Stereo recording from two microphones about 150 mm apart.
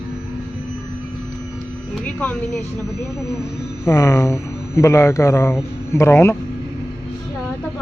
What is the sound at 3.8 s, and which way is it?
Speech, 20° left (ahead or behind).